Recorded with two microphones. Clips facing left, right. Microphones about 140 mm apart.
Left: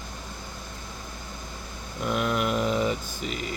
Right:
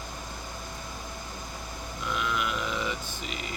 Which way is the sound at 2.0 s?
45° left (ahead or behind).